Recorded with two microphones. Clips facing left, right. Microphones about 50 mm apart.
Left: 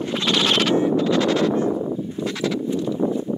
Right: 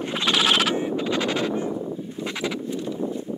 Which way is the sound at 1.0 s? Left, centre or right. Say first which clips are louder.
Left 5 dB; centre.